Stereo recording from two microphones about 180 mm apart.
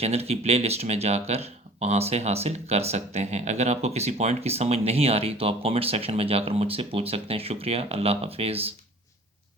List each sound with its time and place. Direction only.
0.0 s speech: 35° right (ahead or behind)